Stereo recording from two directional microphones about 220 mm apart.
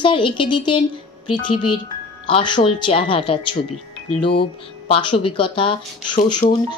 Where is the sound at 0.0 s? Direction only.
25° left (ahead or behind).